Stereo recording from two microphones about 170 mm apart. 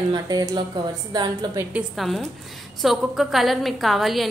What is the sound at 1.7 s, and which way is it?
A woman's voice, 5° right (ahead or behind).